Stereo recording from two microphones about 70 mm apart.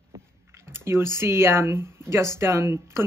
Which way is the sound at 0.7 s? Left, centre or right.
Right.